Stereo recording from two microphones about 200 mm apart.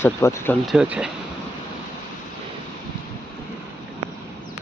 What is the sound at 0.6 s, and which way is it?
Speech, 5° right (ahead or behind).